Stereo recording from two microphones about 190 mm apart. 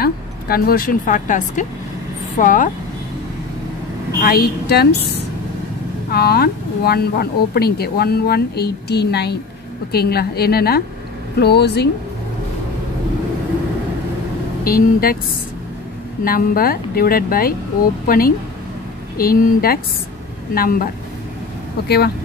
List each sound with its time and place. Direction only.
0.0 s speech: 55° left (ahead or behind)
4.2 s speech: 55° left (ahead or behind)
14.6 s speech: 50° left (ahead or behind)
16.3 s speech: 50° left (ahead or behind)